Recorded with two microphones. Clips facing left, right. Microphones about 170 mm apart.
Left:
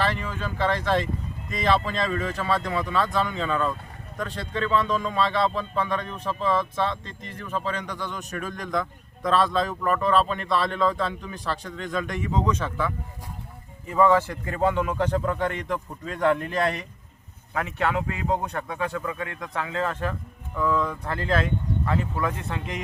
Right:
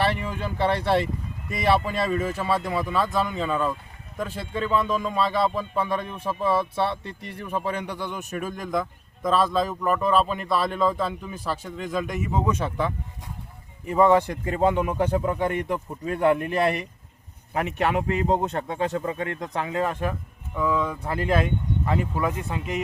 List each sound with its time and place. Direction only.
0.0 s a man's voice: 15° right (ahead or behind)
21.8 s a man's voice: 25° right (ahead or behind); by 22.8 s 5° right (ahead or behind)